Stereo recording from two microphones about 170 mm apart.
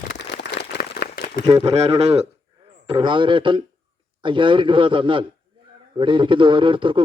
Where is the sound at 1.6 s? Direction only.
40° right (ahead or behind).